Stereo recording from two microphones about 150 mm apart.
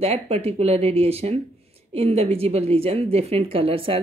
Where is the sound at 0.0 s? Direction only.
45° right (ahead or behind).